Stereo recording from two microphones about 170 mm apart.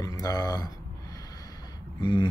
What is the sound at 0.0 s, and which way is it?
Speech, 20° left (ahead or behind).